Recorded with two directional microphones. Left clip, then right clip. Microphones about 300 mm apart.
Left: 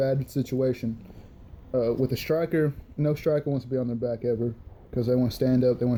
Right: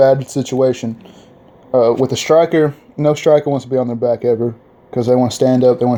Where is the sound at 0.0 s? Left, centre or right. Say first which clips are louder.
Right 15 dB; right.